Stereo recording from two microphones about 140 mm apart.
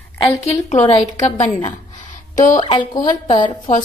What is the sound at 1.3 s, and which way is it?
Speech, 55° left (ahead or behind).